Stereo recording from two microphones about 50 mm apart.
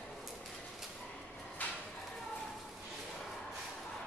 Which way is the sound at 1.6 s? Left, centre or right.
Left.